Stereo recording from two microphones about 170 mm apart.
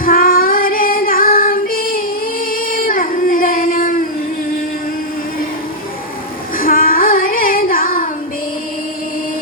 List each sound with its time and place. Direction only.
0.0 s female singing: 55° left (ahead or behind)
2.5 s singing: 55° left (ahead or behind)
6.6 s music: 55° left (ahead or behind)